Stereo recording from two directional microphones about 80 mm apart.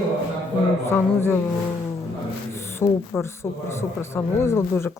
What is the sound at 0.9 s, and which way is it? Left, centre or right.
Speech, left.